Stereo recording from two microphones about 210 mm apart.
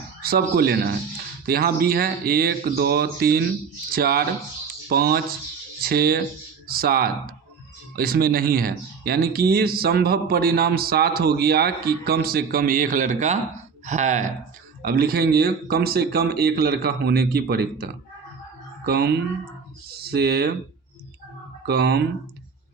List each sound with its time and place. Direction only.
0.2 s speech: 45° right (ahead or behind)
14.8 s speech: 45° right (ahead or behind)
18.9 s speech: 50° right (ahead or behind)
21.7 s speech: 50° right (ahead or behind)